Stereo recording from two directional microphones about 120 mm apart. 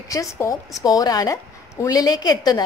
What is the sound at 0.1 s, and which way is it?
A woman's voice, 25° left (ahead or behind).